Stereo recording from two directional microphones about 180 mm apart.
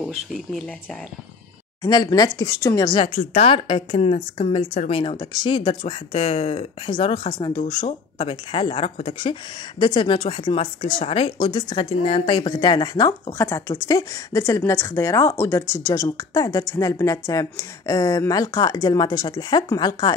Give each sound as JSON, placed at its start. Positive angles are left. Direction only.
{"t": 0.0, "sound": "speech", "side_deg": 0}
{"t": 1.8, "sound": "speech", "side_deg": 20}
{"t": 3.2, "sound": "a woman's voice", "side_deg": 35}